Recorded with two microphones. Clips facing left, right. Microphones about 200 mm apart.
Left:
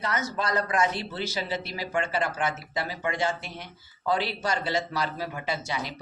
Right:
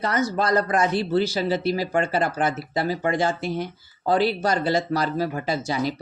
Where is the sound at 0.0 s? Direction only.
35° right (ahead or behind).